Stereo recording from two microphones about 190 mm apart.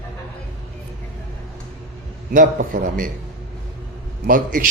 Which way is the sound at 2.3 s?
45° right (ahead or behind).